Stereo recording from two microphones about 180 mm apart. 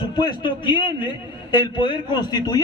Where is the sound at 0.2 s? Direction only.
25° left (ahead or behind).